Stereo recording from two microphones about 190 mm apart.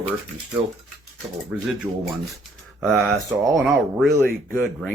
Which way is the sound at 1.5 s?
5° right (ahead or behind).